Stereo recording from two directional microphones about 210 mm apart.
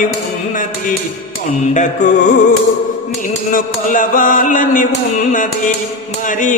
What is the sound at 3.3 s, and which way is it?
Speech, 40° left (ahead or behind).